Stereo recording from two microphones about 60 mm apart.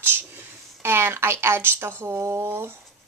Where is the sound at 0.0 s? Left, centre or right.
Right.